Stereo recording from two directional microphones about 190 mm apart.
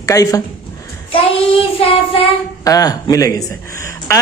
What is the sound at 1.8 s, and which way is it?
Speech, 30° left (ahead or behind).